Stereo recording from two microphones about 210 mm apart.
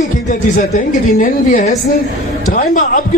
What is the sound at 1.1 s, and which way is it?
A man's voice, 35° left (ahead or behind).